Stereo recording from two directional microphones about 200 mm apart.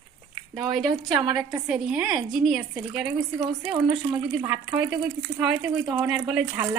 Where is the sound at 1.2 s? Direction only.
20° right (ahead or behind).